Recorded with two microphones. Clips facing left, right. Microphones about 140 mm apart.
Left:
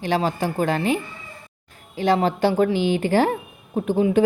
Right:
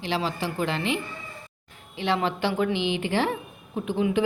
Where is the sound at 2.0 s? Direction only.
40° left (ahead or behind).